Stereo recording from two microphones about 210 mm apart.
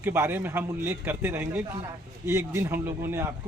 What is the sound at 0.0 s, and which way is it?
A man's voice, 10° right (ahead or behind).